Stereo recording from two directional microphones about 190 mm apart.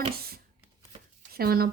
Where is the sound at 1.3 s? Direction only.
50° right (ahead or behind).